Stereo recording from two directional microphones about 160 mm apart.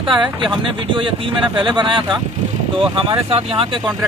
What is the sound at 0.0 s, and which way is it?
Speech, 30° right (ahead or behind).